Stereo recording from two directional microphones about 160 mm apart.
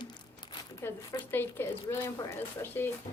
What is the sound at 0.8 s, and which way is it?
Speech, 15° left (ahead or behind).